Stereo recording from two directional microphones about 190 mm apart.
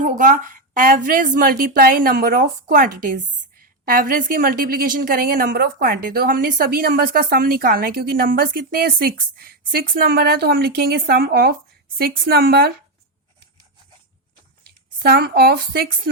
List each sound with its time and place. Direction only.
0.0 s a woman's voice: 45° right (ahead or behind)
14.9 s a woman's voice: 55° right (ahead or behind)